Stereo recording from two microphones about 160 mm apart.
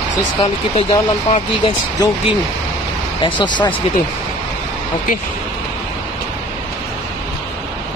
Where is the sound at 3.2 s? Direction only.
30° left (ahead or behind).